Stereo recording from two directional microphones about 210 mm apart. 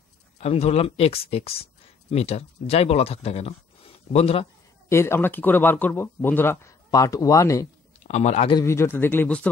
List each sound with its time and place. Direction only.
0.4 s speech: 30° left (ahead or behind)
4.8 s speech: 10° left (ahead or behind)
8.1 s a man's voice: 35° left (ahead or behind)
8.5 s speech: 10° left (ahead or behind)